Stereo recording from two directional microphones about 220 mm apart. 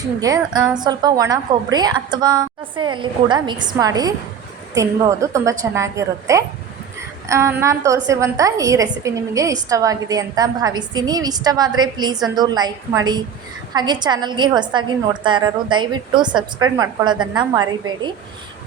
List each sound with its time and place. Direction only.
0.2 s a woman's voice: 15° right (ahead or behind)